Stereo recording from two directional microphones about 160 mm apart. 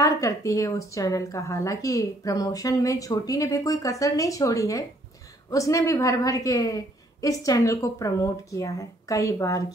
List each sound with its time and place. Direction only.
0.0 s speech: 20° left (ahead or behind)